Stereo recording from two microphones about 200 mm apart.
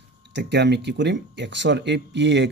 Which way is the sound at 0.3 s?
60° right (ahead or behind).